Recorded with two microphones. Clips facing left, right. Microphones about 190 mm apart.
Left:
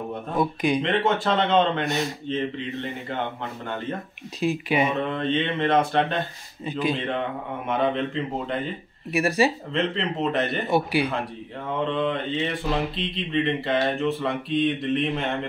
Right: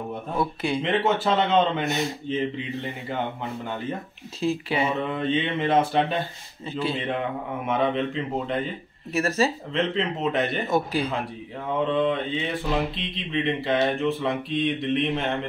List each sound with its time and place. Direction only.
0.4 s speech: 15° left (ahead or behind)
0.8 s speech: 5° right (ahead or behind)
4.4 s speech: 15° left (ahead or behind)
5.0 s speech: 5° right (ahead or behind)
6.6 s speech: 15° left (ahead or behind)
7.6 s speech: centre (ahead or behind)
9.1 s speech: 15° left (ahead or behind)
9.7 s speech: centre (ahead or behind)
10.7 s speech: 15° left (ahead or behind)
11.9 s speech: centre (ahead or behind)